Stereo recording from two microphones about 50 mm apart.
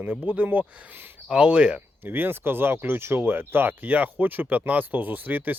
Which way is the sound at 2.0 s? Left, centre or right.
Right.